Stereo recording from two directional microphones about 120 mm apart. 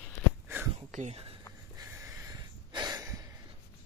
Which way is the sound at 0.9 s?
90° right.